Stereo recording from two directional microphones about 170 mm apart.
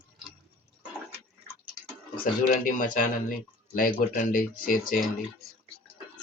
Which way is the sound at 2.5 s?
50° left (ahead or behind).